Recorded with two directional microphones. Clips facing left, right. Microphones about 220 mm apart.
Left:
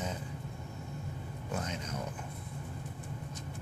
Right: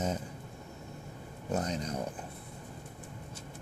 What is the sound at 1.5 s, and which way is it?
Speech, 35° right (ahead or behind).